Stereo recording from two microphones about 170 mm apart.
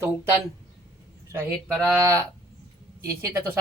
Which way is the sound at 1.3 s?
15° right (ahead or behind).